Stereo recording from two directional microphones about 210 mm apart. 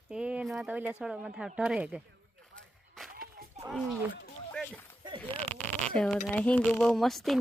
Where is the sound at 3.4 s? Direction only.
45° right (ahead or behind).